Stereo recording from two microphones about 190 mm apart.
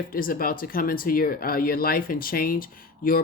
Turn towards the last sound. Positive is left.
turn(degrees=50)  # may be behind; listen again after turning